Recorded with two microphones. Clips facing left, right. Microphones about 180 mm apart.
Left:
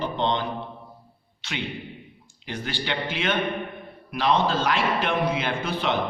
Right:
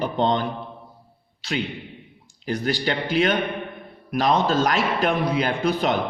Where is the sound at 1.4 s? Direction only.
35° right (ahead or behind).